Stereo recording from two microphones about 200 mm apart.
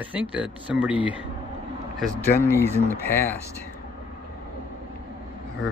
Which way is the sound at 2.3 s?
10° left (ahead or behind).